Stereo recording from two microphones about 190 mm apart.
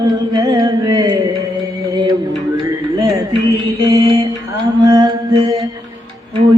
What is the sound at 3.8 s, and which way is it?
Mantra, 15° right (ahead or behind).